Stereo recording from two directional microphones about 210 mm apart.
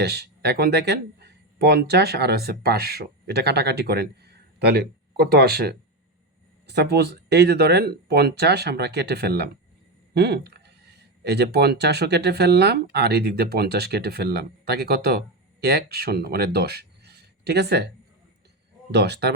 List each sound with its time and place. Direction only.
0.0 s speech: 50° right (ahead or behind)
18.9 s speech: 50° right (ahead or behind)